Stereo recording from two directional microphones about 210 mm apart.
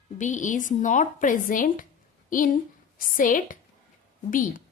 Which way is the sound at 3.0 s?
40° left (ahead or behind).